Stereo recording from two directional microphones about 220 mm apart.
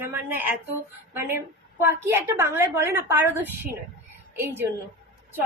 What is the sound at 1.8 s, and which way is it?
A woman's voice, 10° right (ahead or behind).